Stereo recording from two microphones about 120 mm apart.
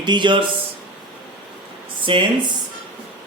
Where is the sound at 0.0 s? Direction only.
40° right (ahead or behind).